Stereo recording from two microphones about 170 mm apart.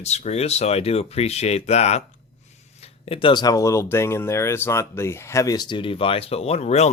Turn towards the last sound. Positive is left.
turn(degrees=40)  # may be behind; listen again after turning